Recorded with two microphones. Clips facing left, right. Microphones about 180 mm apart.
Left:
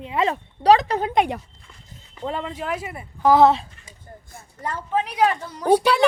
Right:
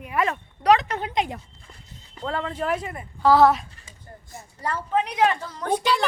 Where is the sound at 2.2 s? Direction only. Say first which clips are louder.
Even; 15° left (ahead or behind).